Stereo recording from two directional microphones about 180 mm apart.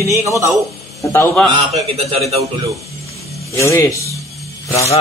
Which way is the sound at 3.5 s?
15° left (ahead or behind).